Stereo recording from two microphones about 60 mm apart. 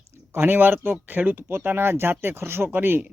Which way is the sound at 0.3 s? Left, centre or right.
Right.